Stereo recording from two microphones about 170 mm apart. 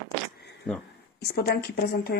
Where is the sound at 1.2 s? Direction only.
70° left (ahead or behind).